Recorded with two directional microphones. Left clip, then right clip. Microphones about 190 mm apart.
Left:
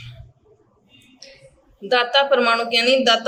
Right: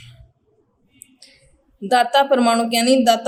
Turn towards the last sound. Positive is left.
turn(degrees=-30)  # may be behind; listen again after turning